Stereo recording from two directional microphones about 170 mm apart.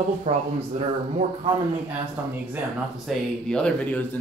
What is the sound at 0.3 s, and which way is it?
Speech, 40° right (ahead or behind).